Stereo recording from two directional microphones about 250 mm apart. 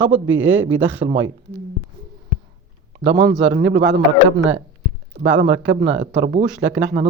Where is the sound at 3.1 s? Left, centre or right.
Right.